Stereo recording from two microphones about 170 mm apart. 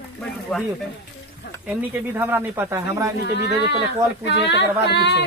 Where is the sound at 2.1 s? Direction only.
15° right (ahead or behind).